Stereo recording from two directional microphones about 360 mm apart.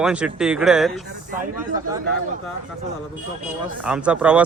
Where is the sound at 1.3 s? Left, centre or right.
Right.